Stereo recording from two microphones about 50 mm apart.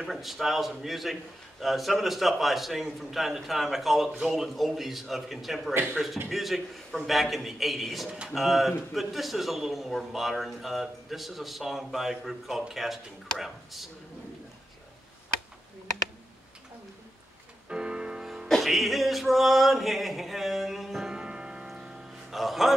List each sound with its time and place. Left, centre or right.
0.0 s a man's voice: centre
17.6 s music: centre
18.5 s music: centre
21.1 s music: centre
22.3 s a man's voice: centre